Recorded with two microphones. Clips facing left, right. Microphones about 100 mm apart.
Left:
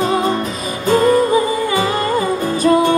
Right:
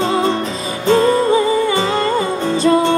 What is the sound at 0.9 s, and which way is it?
Music, 25° right (ahead or behind).